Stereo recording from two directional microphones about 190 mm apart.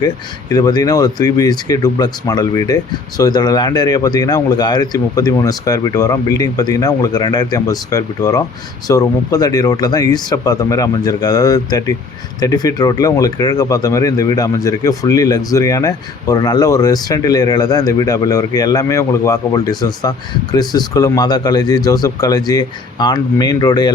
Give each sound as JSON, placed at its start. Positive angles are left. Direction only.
{"t": 0.5, "sound": "speech", "side_deg": 20}